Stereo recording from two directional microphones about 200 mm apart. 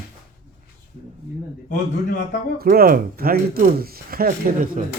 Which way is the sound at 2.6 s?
45° right (ahead or behind).